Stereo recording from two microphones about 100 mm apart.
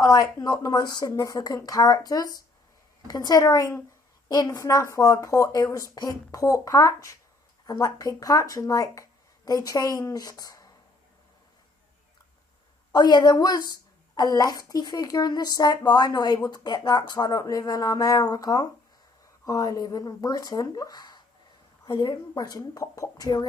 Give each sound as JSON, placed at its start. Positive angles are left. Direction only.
{"t": 0.0, "sound": "a woman's voice", "side_deg": 35}
{"t": 12.9, "sound": "a woman's voice", "side_deg": 45}